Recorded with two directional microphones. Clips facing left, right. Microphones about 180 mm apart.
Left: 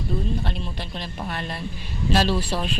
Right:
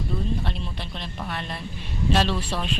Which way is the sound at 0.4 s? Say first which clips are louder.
Left 2 dB; centre (ahead or behind).